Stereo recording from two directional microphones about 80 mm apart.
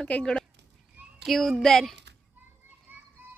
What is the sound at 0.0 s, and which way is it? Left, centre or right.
Speech, centre.